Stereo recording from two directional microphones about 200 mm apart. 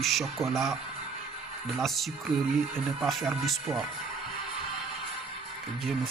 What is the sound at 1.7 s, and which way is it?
Speech, centre (ahead or behind).